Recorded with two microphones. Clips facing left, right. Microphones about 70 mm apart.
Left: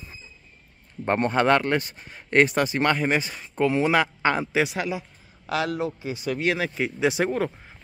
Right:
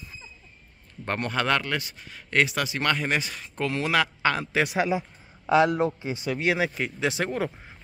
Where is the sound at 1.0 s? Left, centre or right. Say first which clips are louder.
Left 6 dB; left.